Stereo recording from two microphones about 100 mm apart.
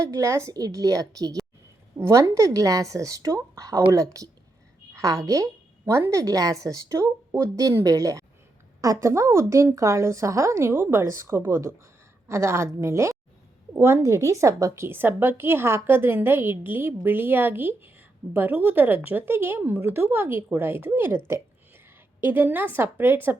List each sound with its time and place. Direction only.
0.0 s a woman's voice: 30° right (ahead or behind)
22.2 s a woman's voice: 20° right (ahead or behind)